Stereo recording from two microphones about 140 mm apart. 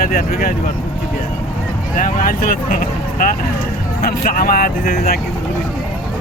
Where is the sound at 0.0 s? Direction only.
90° left.